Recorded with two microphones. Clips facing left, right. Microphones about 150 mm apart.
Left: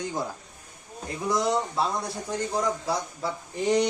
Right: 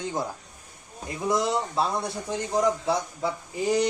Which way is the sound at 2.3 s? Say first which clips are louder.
Right 3 dB; 20° right (ahead or behind).